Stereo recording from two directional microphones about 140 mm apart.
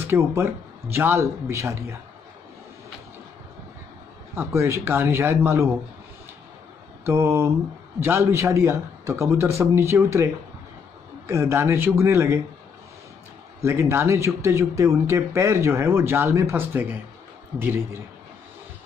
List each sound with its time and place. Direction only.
0.0 s speech: 20° right (ahead or behind)
4.4 s speech: 20° right (ahead or behind)
7.1 s speech: 20° right (ahead or behind)
11.2 s speech: 20° right (ahead or behind)
13.7 s speech: 20° right (ahead or behind)